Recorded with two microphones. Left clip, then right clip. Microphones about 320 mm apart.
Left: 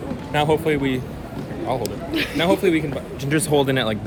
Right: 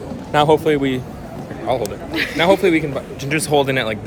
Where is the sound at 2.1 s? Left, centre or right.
Centre.